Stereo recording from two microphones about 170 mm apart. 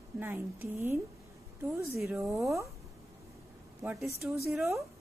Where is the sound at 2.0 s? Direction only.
15° right (ahead or behind).